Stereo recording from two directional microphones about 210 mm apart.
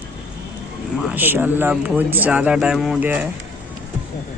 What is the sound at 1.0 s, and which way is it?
Speech, 5° right (ahead or behind).